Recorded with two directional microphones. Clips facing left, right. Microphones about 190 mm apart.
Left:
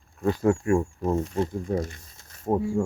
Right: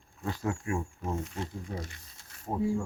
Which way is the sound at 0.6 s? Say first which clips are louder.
Left 10 dB; 45° left (ahead or behind).